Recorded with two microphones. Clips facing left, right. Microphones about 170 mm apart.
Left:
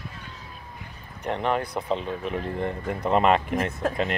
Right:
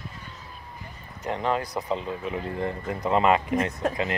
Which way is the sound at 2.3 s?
15° right (ahead or behind).